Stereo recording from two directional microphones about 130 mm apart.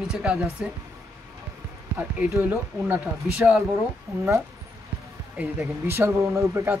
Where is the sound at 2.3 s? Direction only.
15° right (ahead or behind).